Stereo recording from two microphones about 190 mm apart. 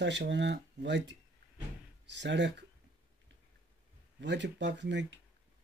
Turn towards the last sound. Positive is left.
turn(degrees=-70)  # may be behind; listen again after turning